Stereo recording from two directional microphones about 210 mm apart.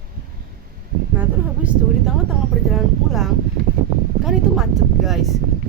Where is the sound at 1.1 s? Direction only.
10° right (ahead or behind).